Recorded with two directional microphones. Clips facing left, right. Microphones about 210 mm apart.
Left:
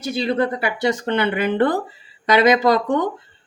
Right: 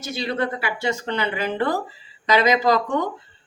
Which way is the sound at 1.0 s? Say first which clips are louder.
Left 5 dB; 55° left (ahead or behind).